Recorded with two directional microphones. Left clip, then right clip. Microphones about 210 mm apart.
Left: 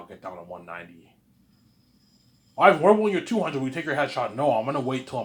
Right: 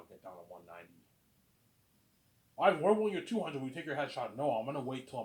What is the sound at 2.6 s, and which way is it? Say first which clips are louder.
A man's voice: left 11 dB; 20° left (ahead or behind).